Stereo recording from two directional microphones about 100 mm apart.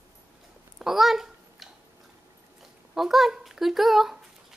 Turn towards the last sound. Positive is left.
turn(degrees=-5)  # may be behind; listen again after turning